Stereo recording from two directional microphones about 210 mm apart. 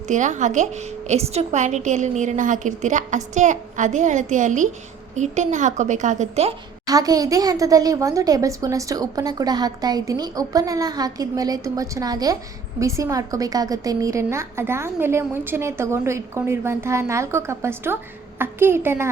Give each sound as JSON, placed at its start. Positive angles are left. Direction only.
{"t": 0.1, "sound": "a woman's voice", "side_deg": -35}
{"t": 6.8, "sound": "speech", "side_deg": -15}